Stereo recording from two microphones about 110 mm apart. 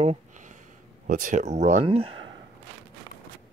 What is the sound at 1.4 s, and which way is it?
Speech, 90° right.